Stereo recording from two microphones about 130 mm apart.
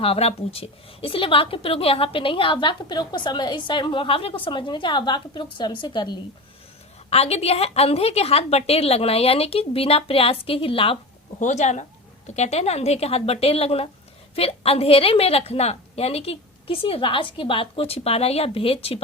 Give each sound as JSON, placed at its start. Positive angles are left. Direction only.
{"t": 0.0, "sound": "a woman's voice", "side_deg": 50}
{"t": 7.1, "sound": "a woman's voice", "side_deg": 55}
{"t": 11.3, "sound": "a woman's voice", "side_deg": 65}